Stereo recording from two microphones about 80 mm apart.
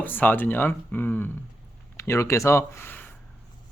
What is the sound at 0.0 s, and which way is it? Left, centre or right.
Speech, left.